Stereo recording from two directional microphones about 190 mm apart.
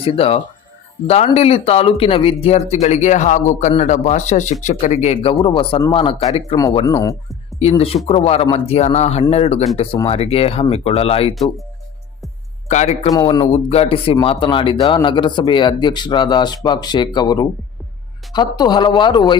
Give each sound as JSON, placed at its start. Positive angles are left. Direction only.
{"t": 0.0, "sound": "speech", "side_deg": 30}
{"t": 6.6, "sound": "speech", "side_deg": 20}
{"t": 7.6, "sound": "speech", "side_deg": 30}
{"t": 12.6, "sound": "speech", "side_deg": 35}